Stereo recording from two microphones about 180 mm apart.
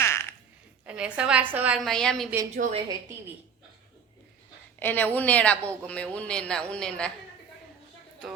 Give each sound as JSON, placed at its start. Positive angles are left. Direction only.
{"t": 0.0, "sound": "a sound", "side_deg": 15}
{"t": 0.9, "sound": "a woman's voice", "side_deg": -5}
{"t": 2.5, "sound": "a woman's voice", "side_deg": -40}
{"t": 4.8, "sound": "a woman's voice", "side_deg": 10}